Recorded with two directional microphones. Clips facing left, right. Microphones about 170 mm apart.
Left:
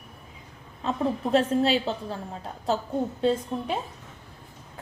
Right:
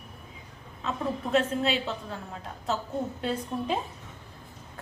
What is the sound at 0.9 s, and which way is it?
A woman's voice, 35° left (ahead or behind).